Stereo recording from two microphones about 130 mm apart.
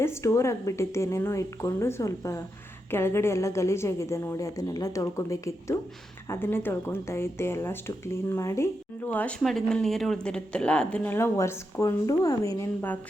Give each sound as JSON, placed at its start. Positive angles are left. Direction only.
{"t": 0.0, "sound": "a woman's voice", "side_deg": 20}
{"t": 9.0, "sound": "a woman's voice", "side_deg": 5}